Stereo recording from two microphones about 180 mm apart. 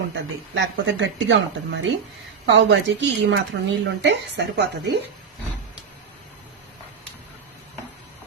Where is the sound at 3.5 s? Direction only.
75° right (ahead or behind).